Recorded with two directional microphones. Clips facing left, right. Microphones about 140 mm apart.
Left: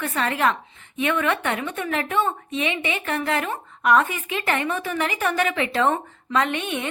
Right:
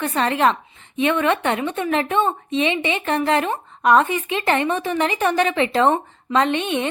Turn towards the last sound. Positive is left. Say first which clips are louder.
# right 4 dB
turn(degrees=-25)  # may be behind; listen again after turning